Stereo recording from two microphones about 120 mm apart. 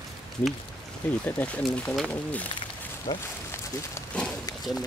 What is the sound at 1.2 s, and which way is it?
Speech, 10° left (ahead or behind).